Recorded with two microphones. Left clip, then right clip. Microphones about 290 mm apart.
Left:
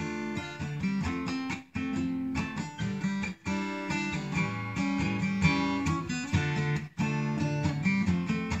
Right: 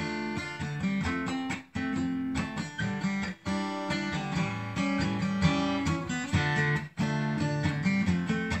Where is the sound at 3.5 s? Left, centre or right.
Centre.